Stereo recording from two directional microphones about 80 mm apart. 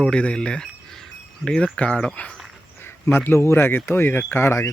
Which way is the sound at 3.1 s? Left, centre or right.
Left.